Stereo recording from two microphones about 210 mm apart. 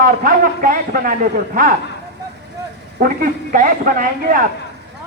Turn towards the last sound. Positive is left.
turn(degrees=-40)  # may be behind; listen again after turning